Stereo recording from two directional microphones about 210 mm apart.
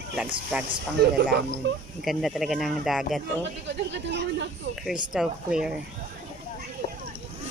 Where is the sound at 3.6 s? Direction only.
55° right (ahead or behind).